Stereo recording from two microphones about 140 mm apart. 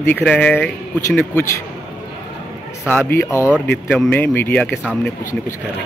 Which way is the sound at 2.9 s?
15° left (ahead or behind).